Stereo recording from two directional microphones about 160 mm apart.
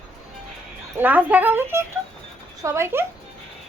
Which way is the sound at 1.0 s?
10° right (ahead or behind).